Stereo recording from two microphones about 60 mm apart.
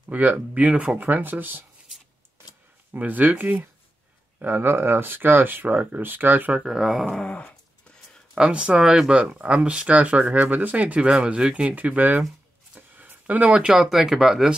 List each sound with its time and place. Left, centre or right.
0.1 s speech: right
3.0 s speech: right
6.5 s speech: centre
7.2 s dog: left
8.4 s speech: centre
12.7 s a sound: right
13.8 s speech: centre